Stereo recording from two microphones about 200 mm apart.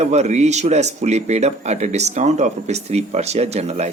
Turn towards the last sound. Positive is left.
turn(degrees=-35)  # may be behind; listen again after turning